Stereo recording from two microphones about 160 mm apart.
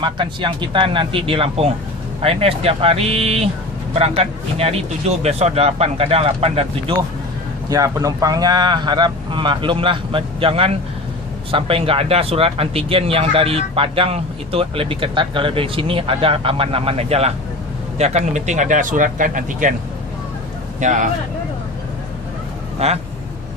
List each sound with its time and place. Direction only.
0.0 s speech: 30° right (ahead or behind)
7.7 s speech: 20° right (ahead or behind); by 19.7 s 55° right (ahead or behind)
20.8 s speech: 50° right (ahead or behind)
22.8 s speech: 40° right (ahead or behind)